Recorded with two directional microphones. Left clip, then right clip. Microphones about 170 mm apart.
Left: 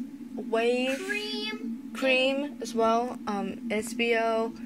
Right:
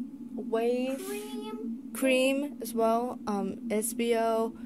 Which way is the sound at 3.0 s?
15° right (ahead or behind).